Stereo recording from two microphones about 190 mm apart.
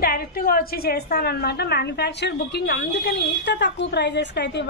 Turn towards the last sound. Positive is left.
turn(degrees=65)  # may be behind; listen again after turning